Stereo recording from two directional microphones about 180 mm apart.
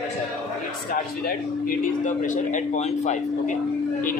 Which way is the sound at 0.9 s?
50° left (ahead or behind).